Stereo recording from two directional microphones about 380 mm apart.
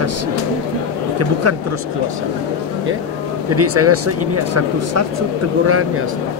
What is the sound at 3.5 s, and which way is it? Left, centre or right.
Speech, right.